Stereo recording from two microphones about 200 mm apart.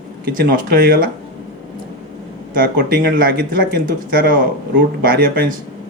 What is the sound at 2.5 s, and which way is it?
Speech, 45° right (ahead or behind).